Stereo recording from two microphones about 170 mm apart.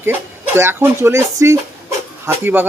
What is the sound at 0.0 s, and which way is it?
Speech, 15° right (ahead or behind).